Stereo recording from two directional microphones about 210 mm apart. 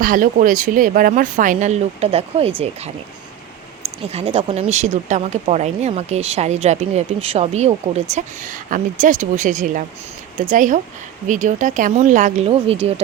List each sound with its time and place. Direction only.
0.0 s speech: 40° right (ahead or behind)
4.0 s speech: 30° right (ahead or behind)